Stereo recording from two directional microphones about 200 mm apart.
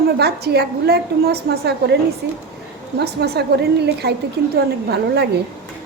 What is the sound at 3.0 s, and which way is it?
A woman's voice, 55° right (ahead or behind).